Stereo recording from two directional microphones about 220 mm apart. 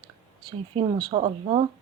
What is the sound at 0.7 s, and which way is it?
Speech, 25° right (ahead or behind).